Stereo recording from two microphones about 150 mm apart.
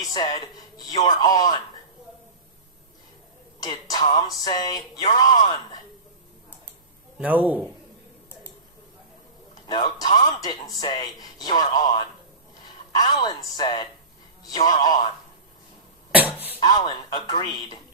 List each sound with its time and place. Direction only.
0.0 s speech: 25° left (ahead or behind)
3.6 s speech: 25° left (ahead or behind)
7.2 s a man's voice: 10° right (ahead or behind)
9.6 s speech: 25° left (ahead or behind)
16.1 s a sound: 10° right (ahead or behind)
16.6 s speech: 30° left (ahead or behind)